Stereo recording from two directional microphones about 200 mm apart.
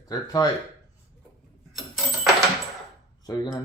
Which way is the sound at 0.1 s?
20° left (ahead or behind).